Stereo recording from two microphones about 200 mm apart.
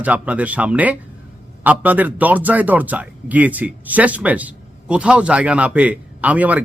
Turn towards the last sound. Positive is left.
turn(degrees=-5)  # may be behind; listen again after turning